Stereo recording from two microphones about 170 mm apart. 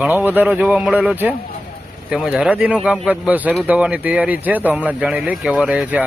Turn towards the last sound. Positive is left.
turn(degrees=-10)  # may be behind; listen again after turning